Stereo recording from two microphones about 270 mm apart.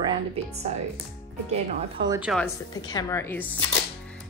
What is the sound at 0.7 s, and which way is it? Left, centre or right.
Speech, right.